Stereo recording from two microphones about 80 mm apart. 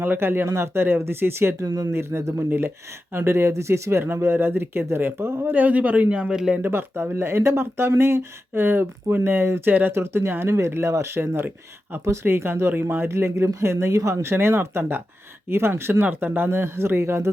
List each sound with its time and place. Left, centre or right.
0.0 s speech: right
1.5 s speech: right
1.9 s speech: right
5.5 s speech: centre
6.6 s speech: right